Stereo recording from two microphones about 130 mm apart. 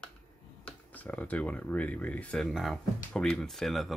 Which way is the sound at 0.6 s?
10° left (ahead or behind).